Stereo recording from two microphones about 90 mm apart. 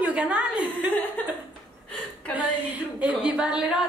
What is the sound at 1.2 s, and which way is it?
Speech, 15° left (ahead or behind).